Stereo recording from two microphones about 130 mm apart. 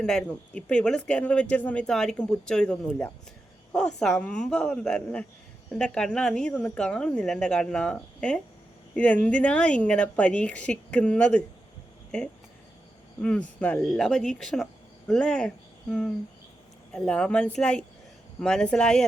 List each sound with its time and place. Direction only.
0.0 s speech: 5° left (ahead or behind)